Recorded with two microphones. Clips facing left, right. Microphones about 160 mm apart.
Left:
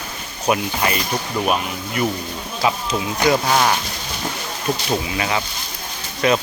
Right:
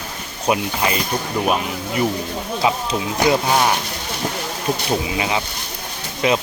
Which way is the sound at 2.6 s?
20° right (ahead or behind).